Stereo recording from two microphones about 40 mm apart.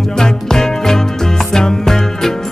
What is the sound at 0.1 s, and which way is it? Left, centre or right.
Music, centre.